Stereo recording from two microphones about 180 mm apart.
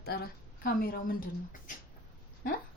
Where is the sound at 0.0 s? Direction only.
60° left (ahead or behind).